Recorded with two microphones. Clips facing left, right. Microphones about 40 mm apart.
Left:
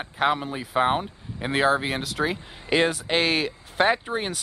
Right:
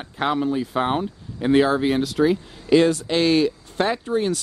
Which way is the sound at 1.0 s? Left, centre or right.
Centre.